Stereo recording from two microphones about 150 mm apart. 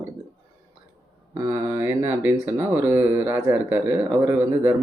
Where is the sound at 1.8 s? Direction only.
15° right (ahead or behind).